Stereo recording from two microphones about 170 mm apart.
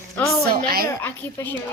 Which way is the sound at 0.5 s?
65° right (ahead or behind).